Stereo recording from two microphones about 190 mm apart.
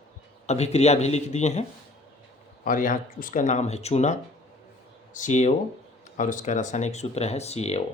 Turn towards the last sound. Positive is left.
turn(degrees=35)  # may be behind; listen again after turning